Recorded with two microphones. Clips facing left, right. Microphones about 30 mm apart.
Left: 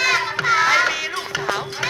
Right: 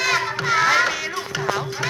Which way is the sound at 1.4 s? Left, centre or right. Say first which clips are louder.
Right 2 dB; centre.